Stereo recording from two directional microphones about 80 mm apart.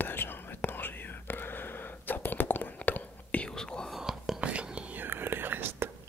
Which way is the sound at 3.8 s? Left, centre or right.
Centre.